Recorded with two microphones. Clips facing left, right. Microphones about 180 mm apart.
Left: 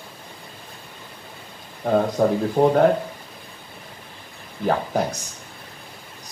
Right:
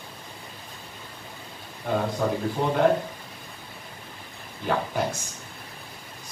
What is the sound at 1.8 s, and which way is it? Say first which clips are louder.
Speech: left 7 dB; 45° left (ahead or behind).